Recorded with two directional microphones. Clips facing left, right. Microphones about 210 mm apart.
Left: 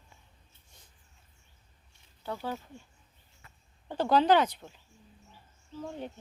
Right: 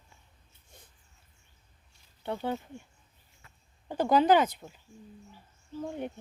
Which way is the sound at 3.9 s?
10° right (ahead or behind).